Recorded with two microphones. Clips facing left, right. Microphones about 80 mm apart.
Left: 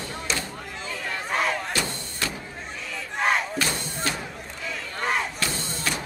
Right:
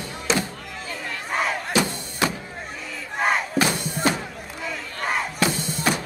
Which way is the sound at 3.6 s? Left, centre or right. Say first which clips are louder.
Right 6 dB; centre.